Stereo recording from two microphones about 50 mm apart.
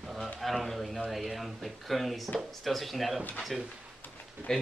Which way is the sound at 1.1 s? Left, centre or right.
Centre.